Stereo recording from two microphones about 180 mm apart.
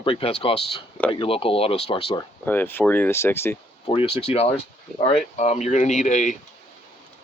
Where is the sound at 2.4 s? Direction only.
10° left (ahead or behind).